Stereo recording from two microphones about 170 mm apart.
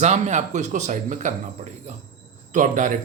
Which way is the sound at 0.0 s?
45° right (ahead or behind).